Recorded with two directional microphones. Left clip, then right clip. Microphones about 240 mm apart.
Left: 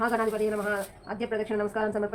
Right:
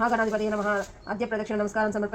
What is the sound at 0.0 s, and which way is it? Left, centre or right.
A woman's voice, right.